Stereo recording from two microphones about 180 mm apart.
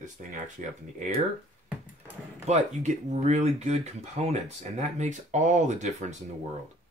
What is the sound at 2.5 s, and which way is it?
Speech, 40° right (ahead or behind).